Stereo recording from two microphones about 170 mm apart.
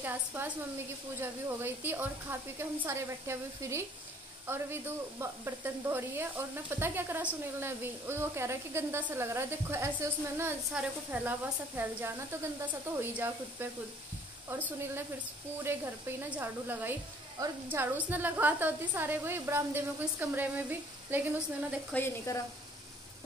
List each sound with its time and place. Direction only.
0.0 s speech: 10° right (ahead or behind)
21.9 s speech: 15° left (ahead or behind)